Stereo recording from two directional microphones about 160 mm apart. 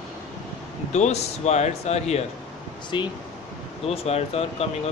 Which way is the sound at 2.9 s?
30° left (ahead or behind).